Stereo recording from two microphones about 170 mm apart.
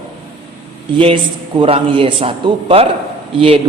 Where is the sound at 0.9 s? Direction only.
30° right (ahead or behind).